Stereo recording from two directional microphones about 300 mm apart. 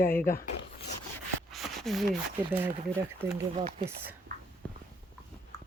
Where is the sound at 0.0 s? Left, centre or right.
Centre.